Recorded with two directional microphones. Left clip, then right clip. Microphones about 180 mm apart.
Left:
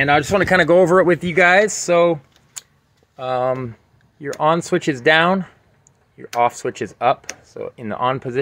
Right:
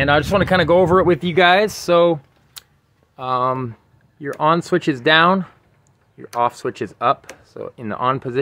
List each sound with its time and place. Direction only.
0.3 s speech: 5° right (ahead or behind); by 2.1 s 20° right (ahead or behind)
3.2 s speech: 15° right (ahead or behind)